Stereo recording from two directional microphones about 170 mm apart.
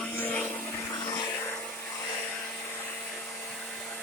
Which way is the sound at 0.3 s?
10° left (ahead or behind).